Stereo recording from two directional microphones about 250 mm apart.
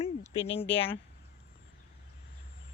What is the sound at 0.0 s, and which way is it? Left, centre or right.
Speech, left.